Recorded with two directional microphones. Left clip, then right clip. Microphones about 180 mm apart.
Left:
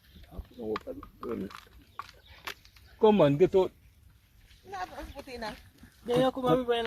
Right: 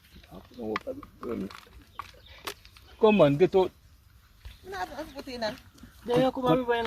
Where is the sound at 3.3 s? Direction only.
10° left (ahead or behind).